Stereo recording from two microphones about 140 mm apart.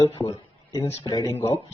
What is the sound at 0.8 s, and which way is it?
Speech, 45° left (ahead or behind).